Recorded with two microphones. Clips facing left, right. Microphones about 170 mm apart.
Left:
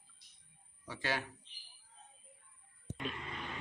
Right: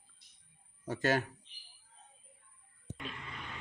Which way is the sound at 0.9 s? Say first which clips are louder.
Right 8 dB; 45° right (ahead or behind).